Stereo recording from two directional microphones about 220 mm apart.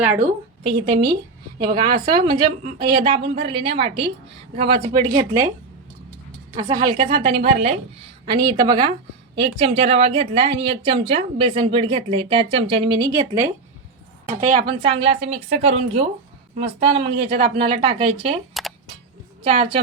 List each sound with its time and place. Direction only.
0.6 s a woman's voice: 25° right (ahead or behind)
1.8 s a woman's voice: 40° right (ahead or behind)
2.2 s a woman's voice: 25° right (ahead or behind)
6.5 s a woman's voice: 20° right (ahead or behind)
14.3 s a woman's voice: 35° right (ahead or behind)
14.7 s a woman's voice: 25° right (ahead or behind)
18.5 s camera: centre (ahead or behind)
19.4 s a woman's voice: 25° right (ahead or behind)